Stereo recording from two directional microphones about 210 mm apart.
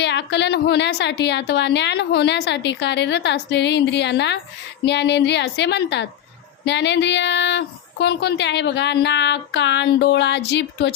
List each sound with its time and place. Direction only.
0.0 s a woman's voice: 55° left (ahead or behind)